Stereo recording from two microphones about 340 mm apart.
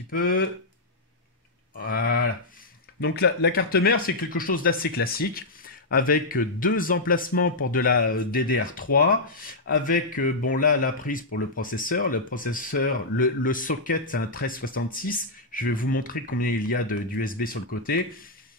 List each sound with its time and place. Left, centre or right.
0.1 s speech: left
1.8 s a sound: left
3.0 s speech: left